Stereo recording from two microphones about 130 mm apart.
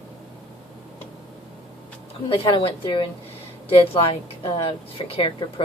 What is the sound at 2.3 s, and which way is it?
A woman's voice, 40° left (ahead or behind).